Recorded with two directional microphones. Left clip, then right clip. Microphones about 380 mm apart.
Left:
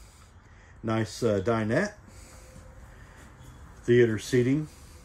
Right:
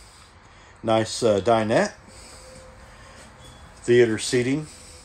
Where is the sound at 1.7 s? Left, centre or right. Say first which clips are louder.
Right 7 dB; centre.